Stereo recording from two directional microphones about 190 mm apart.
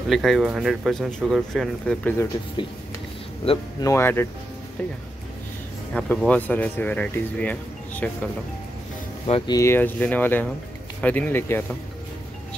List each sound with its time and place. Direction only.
0.1 s speech: centre (ahead or behind)
2.6 s speech: 25° left (ahead or behind)
5.9 s speech: 5° left (ahead or behind)
9.2 s speech: 30° left (ahead or behind)
9.6 s speech: 10° left (ahead or behind)